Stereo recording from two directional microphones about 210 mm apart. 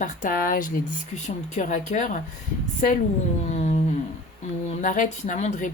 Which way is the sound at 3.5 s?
30° left (ahead or behind).